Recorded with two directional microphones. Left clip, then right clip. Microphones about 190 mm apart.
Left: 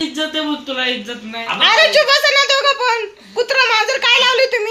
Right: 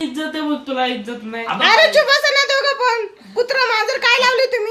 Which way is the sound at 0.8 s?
50° right (ahead or behind).